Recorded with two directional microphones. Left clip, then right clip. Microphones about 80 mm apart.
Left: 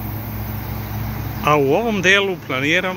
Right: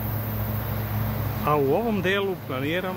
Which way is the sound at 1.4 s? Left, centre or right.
Left.